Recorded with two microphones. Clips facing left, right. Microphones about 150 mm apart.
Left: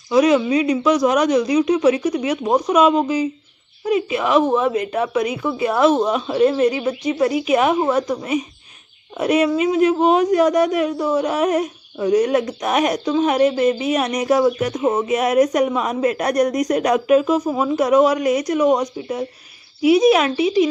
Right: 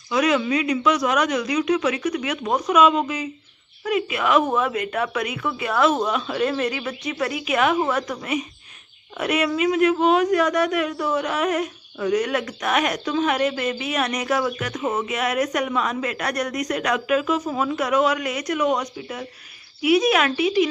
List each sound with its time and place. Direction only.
0.1 s speech: 30° left (ahead or behind)